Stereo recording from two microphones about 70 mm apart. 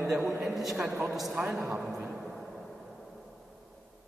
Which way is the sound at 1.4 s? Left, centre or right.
Centre.